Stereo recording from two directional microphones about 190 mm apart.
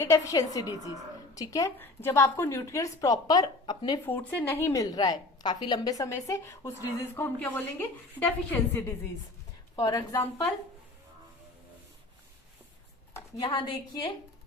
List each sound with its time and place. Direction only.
0.0 s a woman's voice: 15° left (ahead or behind)
4.0 s a woman's voice: 10° left (ahead or behind)
13.4 s a woman's voice: 25° left (ahead or behind)